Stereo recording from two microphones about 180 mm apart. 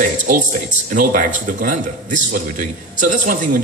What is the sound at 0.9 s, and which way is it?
A man's voice, 50° right (ahead or behind).